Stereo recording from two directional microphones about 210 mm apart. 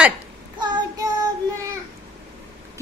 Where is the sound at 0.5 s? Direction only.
20° right (ahead or behind).